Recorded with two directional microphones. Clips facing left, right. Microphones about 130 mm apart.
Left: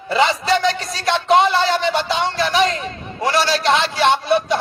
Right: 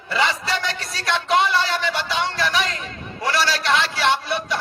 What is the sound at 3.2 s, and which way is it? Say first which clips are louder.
Speech: left 4 dB; 25° left (ahead or behind).